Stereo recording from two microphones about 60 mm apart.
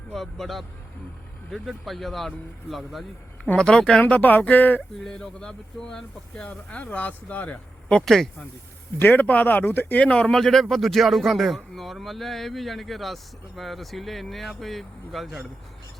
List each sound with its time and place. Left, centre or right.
0.1 s speech: centre
3.6 s speech: centre
4.0 s speech: left
5.0 s speech: centre
8.0 s speech: centre
9.0 s speech: left
10.3 s speech: centre